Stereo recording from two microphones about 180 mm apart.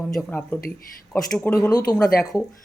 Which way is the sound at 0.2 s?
10° left (ahead or behind).